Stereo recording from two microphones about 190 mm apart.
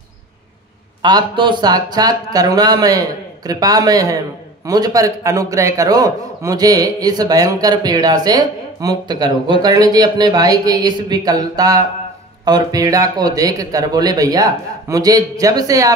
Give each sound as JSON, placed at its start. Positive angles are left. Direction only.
{"t": 1.0, "sound": "a man's voice", "side_deg": -25}